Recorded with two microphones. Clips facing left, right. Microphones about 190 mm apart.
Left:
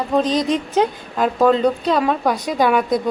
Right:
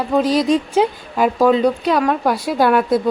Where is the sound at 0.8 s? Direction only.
5° right (ahead or behind).